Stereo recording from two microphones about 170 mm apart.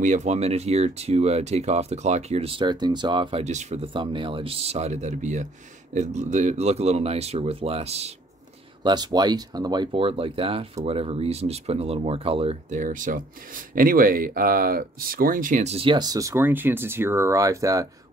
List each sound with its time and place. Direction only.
0.0 s speech: 45° right (ahead or behind)
8.8 s speech: 25° right (ahead or behind)